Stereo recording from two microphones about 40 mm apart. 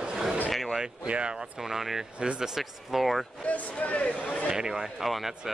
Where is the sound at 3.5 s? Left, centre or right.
Left.